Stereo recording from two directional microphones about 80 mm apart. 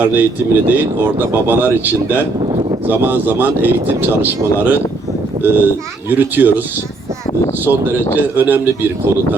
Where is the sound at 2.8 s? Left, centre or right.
Right.